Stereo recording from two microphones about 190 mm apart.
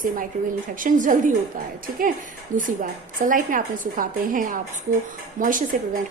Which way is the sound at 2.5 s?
40° right (ahead or behind).